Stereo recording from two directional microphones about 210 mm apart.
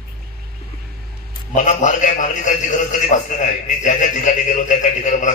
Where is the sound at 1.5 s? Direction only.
35° left (ahead or behind).